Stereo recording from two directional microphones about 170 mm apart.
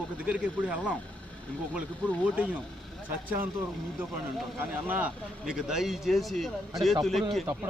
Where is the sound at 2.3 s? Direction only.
10° right (ahead or behind).